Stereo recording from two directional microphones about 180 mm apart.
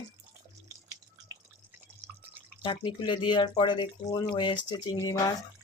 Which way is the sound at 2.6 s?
25° left (ahead or behind).